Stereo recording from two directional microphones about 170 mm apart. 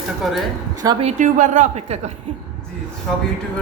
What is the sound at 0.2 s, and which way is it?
Speech, centre (ahead or behind).